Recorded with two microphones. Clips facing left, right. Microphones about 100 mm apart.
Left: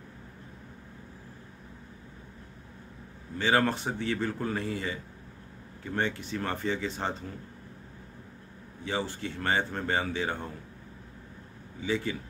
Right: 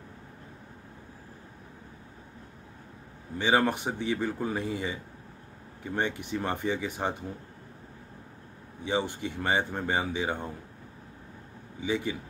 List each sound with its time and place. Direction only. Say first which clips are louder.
3.3 s speech: right 1 dB; 15° right (ahead or behind)
5.9 s speech: right 1 dB; 15° right (ahead or behind)
8.8 s speech: right 3 dB; 20° right (ahead or behind)
11.8 s speech: right 1 dB; 15° right (ahead or behind)